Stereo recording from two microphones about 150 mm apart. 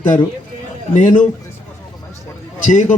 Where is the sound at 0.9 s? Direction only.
55° left (ahead or behind).